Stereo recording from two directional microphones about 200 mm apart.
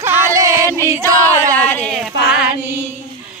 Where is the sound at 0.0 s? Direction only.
15° right (ahead or behind).